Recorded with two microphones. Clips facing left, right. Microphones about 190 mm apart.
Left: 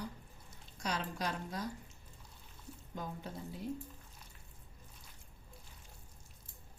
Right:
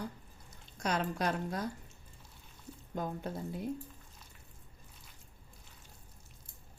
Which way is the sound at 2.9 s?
55° right (ahead or behind).